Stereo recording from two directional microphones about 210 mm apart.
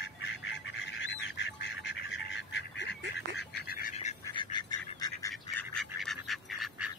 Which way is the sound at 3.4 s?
45° left (ahead or behind).